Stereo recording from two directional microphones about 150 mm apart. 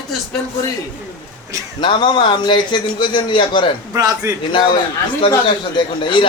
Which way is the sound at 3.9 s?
25° right (ahead or behind).